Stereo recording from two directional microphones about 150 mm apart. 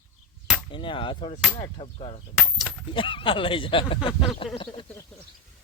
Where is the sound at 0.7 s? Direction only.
35° left (ahead or behind).